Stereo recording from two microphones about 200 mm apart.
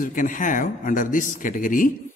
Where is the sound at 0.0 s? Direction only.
40° left (ahead or behind).